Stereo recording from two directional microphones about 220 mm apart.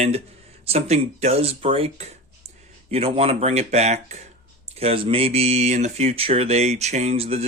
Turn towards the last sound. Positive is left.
turn(degrees=-25)  # may be behind; listen again after turning